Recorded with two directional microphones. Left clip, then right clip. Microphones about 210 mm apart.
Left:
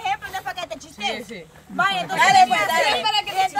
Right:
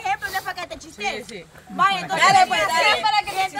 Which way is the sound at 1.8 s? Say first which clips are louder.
Right 1 dB; 5° left (ahead or behind).